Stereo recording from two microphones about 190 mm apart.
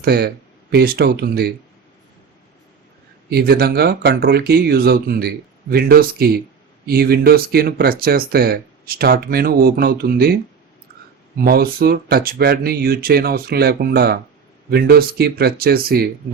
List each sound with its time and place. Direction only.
0.0 s speech: 55° right (ahead or behind)
3.2 s speech: 55° right (ahead or behind)
11.3 s speech: 50° right (ahead or behind)